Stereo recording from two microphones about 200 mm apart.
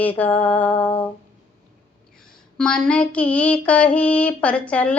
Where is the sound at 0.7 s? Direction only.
25° left (ahead or behind).